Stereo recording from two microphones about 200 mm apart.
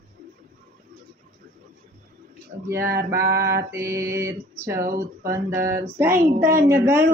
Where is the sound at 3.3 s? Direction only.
50° right (ahead or behind).